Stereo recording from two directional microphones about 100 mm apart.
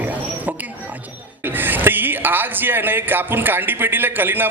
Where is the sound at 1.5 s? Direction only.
20° right (ahead or behind).